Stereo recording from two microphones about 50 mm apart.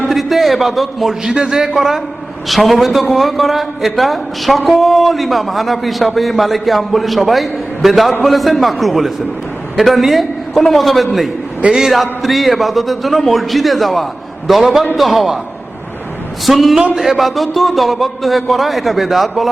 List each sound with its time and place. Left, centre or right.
0.1 s a man's voice: centre
1.3 s a man's voice: centre
16.5 s a man's voice: centre